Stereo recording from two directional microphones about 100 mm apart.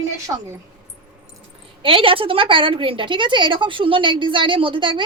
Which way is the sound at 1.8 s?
60° right (ahead or behind).